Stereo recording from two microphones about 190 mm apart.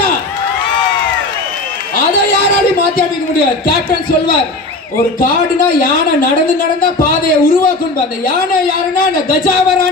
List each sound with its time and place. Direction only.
6.1 s speech: 50° left (ahead or behind)